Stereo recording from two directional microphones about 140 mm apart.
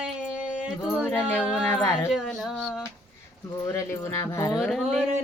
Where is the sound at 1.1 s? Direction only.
15° left (ahead or behind).